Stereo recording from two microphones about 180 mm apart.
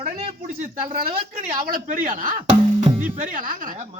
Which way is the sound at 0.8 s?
50° right (ahead or behind).